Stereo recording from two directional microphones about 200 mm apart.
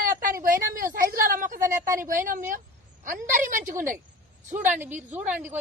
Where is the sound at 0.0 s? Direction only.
45° right (ahead or behind).